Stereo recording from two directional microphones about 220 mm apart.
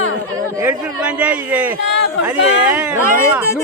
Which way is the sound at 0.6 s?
5° right (ahead or behind).